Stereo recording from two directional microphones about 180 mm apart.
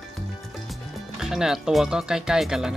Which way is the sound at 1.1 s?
Centre (ahead or behind).